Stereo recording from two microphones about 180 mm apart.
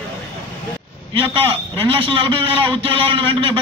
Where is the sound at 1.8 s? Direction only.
30° right (ahead or behind).